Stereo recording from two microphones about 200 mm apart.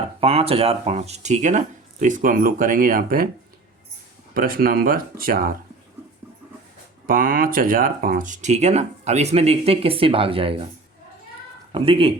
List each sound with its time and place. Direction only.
0.2 s speech: 30° right (ahead or behind); by 3.2 s 45° right (ahead or behind)
4.4 s speech: 45° right (ahead or behind)
7.1 s speech: 45° right (ahead or behind); by 10.7 s 25° right (ahead or behind)
11.7 s speech: 25° right (ahead or behind)